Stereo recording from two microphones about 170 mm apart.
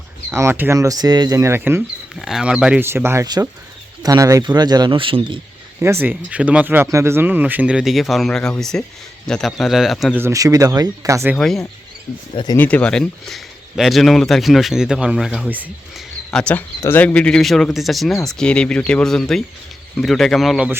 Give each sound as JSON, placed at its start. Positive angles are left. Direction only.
{"t": 0.3, "sound": "speech", "side_deg": -15}
{"t": 2.1, "sound": "speech", "side_deg": 0}
{"t": 5.8, "sound": "speech", "side_deg": -15}
{"t": 10.2, "sound": "speech", "side_deg": -15}
{"t": 11.3, "sound": "speech", "side_deg": 0}
{"t": 16.3, "sound": "speech", "side_deg": 5}